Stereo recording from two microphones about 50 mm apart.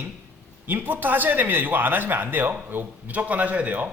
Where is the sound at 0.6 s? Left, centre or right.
Right.